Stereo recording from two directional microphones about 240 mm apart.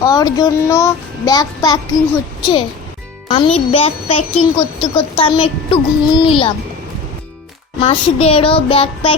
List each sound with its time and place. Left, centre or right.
0.0 s child singing: centre
3.2 s a child's voice: left
7.8 s a child's voice: left